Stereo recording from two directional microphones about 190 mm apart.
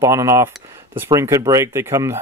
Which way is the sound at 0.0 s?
15° right (ahead or behind).